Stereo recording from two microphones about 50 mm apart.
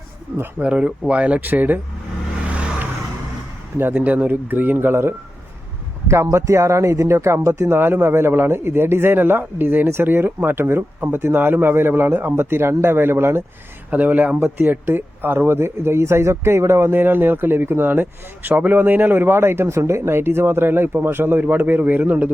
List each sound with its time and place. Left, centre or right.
0.6 s speech: right
1.4 s speech: right
2.5 s vehicle: right
3.9 s speech: right
6.1 s speech: right
7.8 s speech: right
9.8 s speech: right
13.9 s speech: right
16.9 s speech: right
20.0 s speech: right